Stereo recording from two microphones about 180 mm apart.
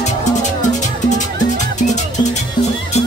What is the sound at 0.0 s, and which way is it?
Music, 40° left (ahead or behind).